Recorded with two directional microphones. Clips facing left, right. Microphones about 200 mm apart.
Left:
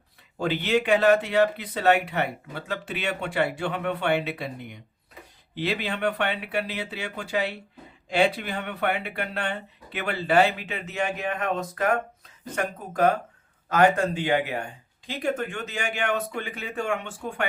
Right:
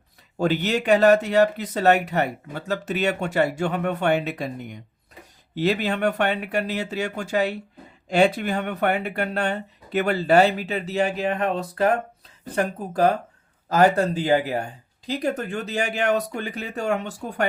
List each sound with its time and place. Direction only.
0.3 s speech: 45° right (ahead or behind)